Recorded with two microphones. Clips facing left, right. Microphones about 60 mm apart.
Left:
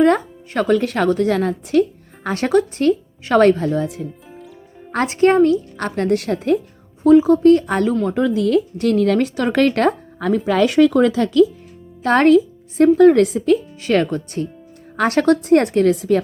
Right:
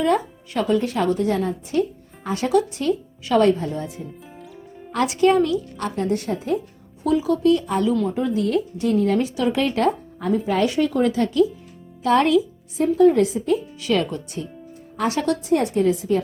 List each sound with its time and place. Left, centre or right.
0.0 s speech: left
0.8 s a woman's voice: left
2.2 s speech: left
2.5 s a woman's voice: left
3.6 s speech: left
4.9 s speech: left
5.7 s a woman's voice: left
7.0 s speech: left
8.0 s a woman's voice: left
12.0 s speech: left
13.7 s a woman's voice: left